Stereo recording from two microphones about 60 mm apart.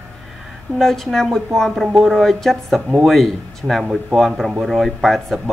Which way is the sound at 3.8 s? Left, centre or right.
Centre.